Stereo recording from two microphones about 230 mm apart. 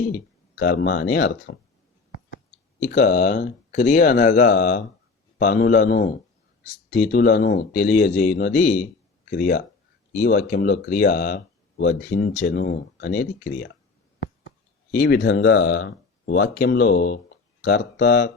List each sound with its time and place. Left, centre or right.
0.5 s speech: left
2.8 s speech: left
14.9 s speech: left